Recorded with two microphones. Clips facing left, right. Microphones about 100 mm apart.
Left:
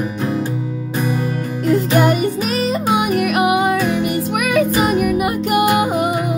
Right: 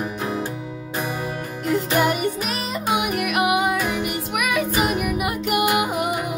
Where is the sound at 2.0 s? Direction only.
40° left (ahead or behind).